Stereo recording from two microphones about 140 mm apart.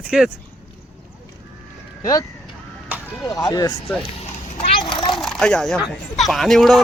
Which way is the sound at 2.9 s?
15° right (ahead or behind).